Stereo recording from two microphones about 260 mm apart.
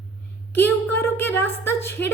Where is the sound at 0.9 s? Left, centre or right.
Centre.